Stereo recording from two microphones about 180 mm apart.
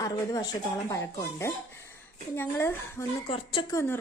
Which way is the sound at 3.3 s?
25° left (ahead or behind).